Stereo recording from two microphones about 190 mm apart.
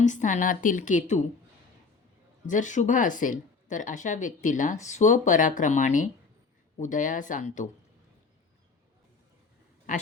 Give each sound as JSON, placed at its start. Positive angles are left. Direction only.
{"t": 0.0, "sound": "speech", "side_deg": 40}
{"t": 2.5, "sound": "speech", "side_deg": 40}